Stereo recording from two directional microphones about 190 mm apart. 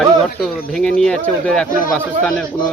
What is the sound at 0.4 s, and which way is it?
Speech, 5° left (ahead or behind).